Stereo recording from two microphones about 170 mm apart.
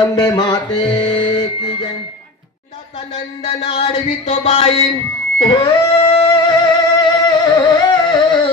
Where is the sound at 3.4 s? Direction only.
35° left (ahead or behind).